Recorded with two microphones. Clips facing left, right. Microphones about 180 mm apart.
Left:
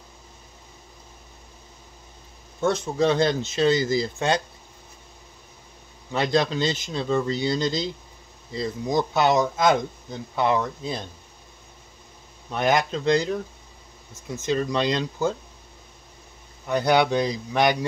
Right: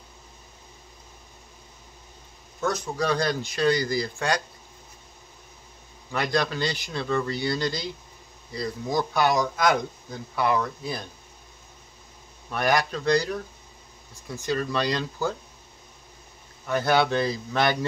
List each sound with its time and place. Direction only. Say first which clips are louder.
2.6 s speech: left 5 dB; 25° left (ahead or behind)
6.1 s speech: left 3 dB; 25° left (ahead or behind)
12.4 s speech: left 2 dB; 20° left (ahead or behind)
16.6 s a man's voice: left 2 dB; 20° left (ahead or behind)